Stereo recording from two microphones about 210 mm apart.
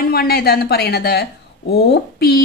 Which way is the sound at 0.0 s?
45° left (ahead or behind).